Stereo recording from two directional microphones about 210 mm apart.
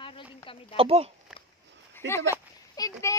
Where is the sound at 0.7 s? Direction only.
25° right (ahead or behind).